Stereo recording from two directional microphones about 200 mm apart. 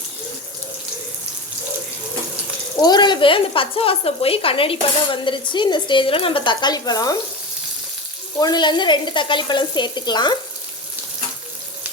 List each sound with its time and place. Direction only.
2.8 s speech: 20° left (ahead or behind)
8.4 s speech: 20° left (ahead or behind)